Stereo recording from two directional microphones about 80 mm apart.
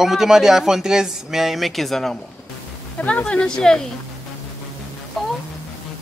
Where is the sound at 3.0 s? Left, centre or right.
Centre.